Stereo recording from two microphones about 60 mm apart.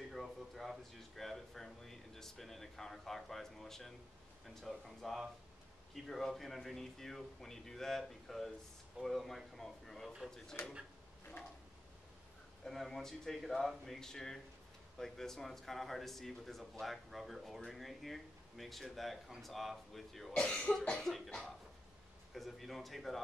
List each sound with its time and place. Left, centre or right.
0.1 s speech: centre
12.6 s speech: centre
20.3 s cough: centre
20.9 s speech: centre